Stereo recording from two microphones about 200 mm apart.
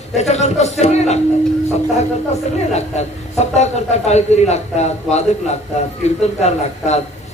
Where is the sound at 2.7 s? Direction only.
35° left (ahead or behind).